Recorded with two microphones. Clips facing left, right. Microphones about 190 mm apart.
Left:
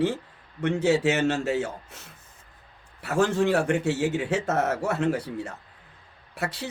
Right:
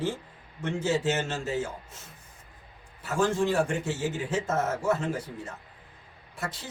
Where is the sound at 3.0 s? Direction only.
65° left (ahead or behind).